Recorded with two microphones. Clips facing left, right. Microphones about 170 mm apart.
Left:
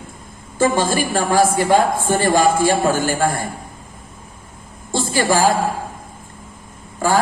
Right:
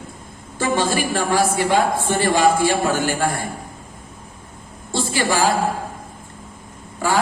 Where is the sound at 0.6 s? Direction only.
45° left (ahead or behind).